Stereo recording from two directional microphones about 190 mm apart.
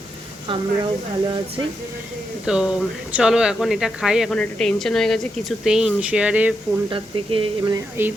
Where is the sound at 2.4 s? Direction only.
5° right (ahead or behind).